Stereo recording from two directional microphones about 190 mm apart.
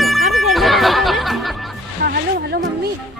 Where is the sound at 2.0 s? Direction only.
55° right (ahead or behind).